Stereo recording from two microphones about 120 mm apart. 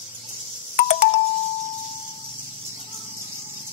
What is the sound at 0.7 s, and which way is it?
Ringtone, 55° left (ahead or behind).